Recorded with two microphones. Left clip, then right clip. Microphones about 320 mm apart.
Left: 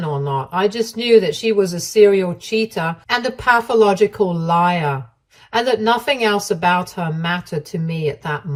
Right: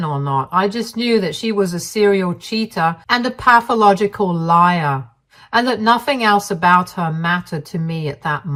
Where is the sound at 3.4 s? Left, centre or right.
Centre.